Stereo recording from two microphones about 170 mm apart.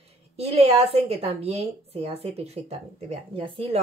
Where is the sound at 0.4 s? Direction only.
35° right (ahead or behind).